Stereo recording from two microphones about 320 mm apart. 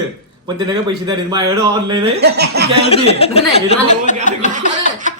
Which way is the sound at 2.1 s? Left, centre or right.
Right.